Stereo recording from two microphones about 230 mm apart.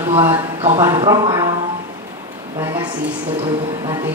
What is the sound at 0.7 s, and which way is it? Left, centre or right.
Speech, centre.